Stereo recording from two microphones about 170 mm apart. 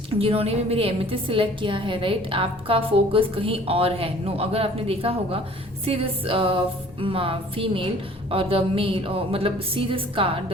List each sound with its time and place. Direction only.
0.1 s a woman's voice: 35° right (ahead or behind)